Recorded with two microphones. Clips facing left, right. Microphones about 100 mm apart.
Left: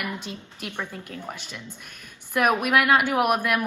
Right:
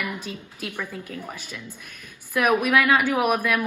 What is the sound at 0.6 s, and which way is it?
A woman's voice, 25° left (ahead or behind).